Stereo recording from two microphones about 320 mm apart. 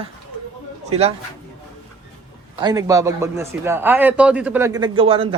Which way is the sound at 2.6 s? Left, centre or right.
Centre.